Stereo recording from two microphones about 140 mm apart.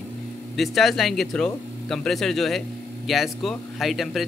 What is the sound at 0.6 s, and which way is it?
Speech, centre (ahead or behind).